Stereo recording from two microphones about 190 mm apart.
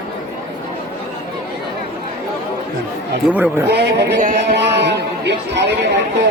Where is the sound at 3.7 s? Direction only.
60° right (ahead or behind).